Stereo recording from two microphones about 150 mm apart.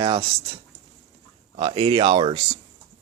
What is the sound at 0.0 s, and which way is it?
Speech, 35° right (ahead or behind).